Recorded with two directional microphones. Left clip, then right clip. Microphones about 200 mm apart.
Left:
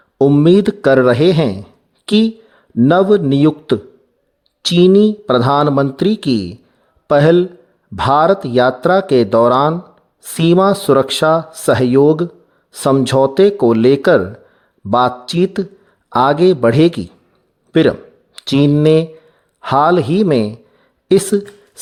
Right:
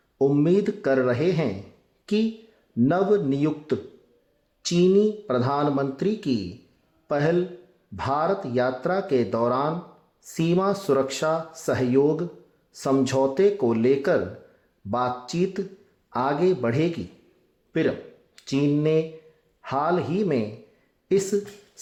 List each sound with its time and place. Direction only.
0.2 s speech: 45° left (ahead or behind)
2.7 s speech: 45° left (ahead or behind)
17.7 s a sound: 50° left (ahead or behind)
18.3 s speech: 50° left (ahead or behind)